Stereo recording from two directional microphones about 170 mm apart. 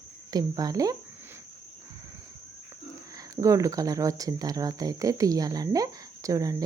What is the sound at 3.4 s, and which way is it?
Speech, 20° right (ahead or behind).